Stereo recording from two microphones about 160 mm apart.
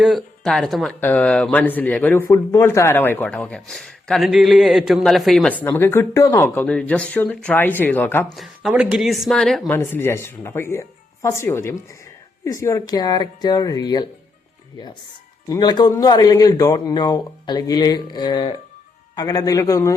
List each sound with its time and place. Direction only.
0.0 s speech: centre (ahead or behind)
8.4 s speech: 5° right (ahead or behind)
9.7 s speech: 15° left (ahead or behind)
15.4 s speech: 25° left (ahead or behind)